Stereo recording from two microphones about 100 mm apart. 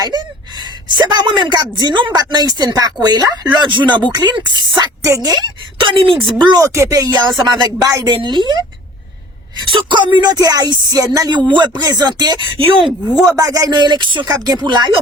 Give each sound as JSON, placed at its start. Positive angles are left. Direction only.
{"t": 0.0, "sound": "a woman's voice", "side_deg": -45}
{"t": 5.0, "sound": "speech", "side_deg": -35}
{"t": 5.8, "sound": "a woman's voice", "side_deg": -55}
{"t": 6.6, "sound": "speech", "side_deg": -30}
{"t": 7.1, "sound": "a woman's voice", "side_deg": -45}
{"t": 8.1, "sound": "a woman's voice", "side_deg": -50}
{"t": 9.6, "sound": "a woman's voice", "side_deg": -50}
{"t": 11.3, "sound": "a woman's voice", "side_deg": -50}
{"t": 12.8, "sound": "speech", "side_deg": -5}
{"t": 13.3, "sound": "a woman's voice", "side_deg": -40}